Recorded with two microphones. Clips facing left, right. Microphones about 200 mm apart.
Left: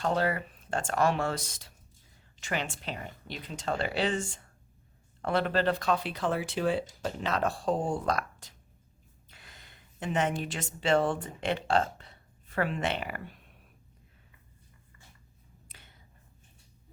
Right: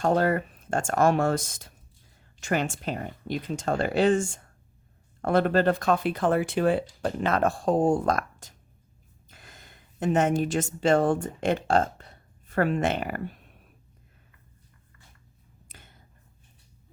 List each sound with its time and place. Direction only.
0.0 s a woman's voice: 45° right (ahead or behind)
15.7 s whispering: 45° right (ahead or behind)